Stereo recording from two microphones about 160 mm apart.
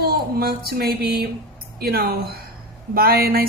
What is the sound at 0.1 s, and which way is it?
A woman's voice, 75° right (ahead or behind).